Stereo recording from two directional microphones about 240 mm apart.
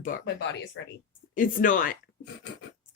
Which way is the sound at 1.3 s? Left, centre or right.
Left.